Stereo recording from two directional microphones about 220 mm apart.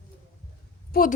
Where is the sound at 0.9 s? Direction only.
40° left (ahead or behind).